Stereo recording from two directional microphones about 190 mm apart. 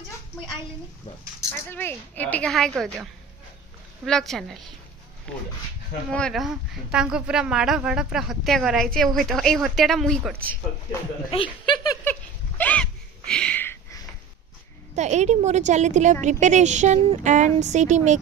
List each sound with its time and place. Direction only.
1.5 s a woman's voice: 10° left (ahead or behind)
4.0 s speech: centre (ahead or behind)
11.2 s a sound: 25° left (ahead or behind)
15.0 s a woman's voice: 35° right (ahead or behind)